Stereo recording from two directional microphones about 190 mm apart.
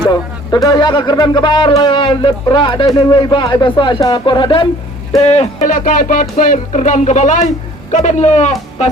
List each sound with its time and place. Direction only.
0.0 s speech: 20° left (ahead or behind)
5.2 s speech: 35° left (ahead or behind)